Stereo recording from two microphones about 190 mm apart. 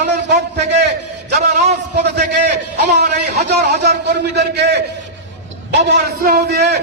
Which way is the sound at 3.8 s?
60° right (ahead or behind).